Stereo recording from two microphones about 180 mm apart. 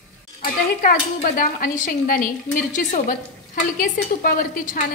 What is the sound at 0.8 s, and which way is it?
Dishes, 50° left (ahead or behind).